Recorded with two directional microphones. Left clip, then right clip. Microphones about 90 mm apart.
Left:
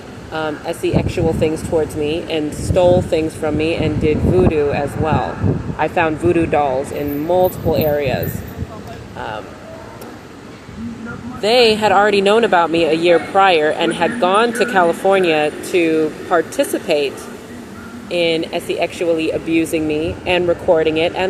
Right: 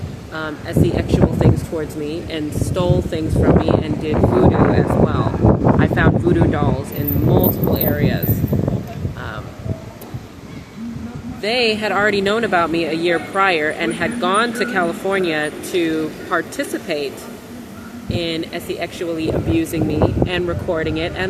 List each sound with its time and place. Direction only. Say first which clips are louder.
0.3 s speech: left 1 dB; 30° right (ahead or behind)
11.4 s speech: left 6 dB; 20° right (ahead or behind)
16.6 s speech: left 6 dB; 20° right (ahead or behind)
18.1 s speech: left 6 dB; 30° right (ahead or behind)